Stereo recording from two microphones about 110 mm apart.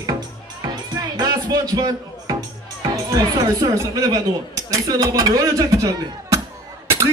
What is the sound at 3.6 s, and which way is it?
Speech, 35° right (ahead or behind).